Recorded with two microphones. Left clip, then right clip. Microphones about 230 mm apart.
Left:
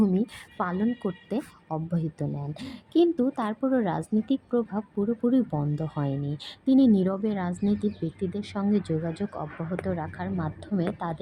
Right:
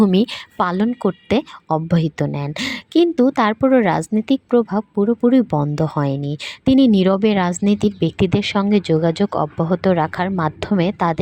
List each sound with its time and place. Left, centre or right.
0.0 s speech: right